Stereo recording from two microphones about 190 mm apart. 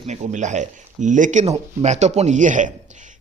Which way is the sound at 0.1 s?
40° right (ahead or behind).